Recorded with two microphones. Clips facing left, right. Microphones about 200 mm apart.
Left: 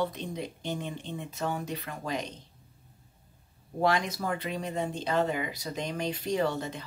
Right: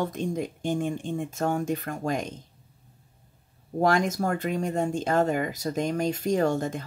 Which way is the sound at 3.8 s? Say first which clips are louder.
Right 4 dB; 45° right (ahead or behind).